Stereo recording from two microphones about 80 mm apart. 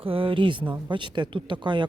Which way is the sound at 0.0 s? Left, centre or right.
Right.